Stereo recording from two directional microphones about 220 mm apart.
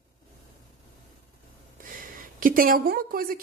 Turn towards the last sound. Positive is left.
turn(degrees=-40)  # may be behind; listen again after turning